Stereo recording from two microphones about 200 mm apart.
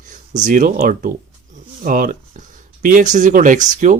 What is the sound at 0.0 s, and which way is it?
Speech, 40° right (ahead or behind).